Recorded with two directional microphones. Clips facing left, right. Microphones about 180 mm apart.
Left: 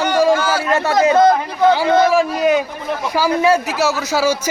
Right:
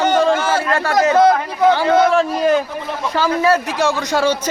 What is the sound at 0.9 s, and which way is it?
A man's voice, 10° left (ahead or behind).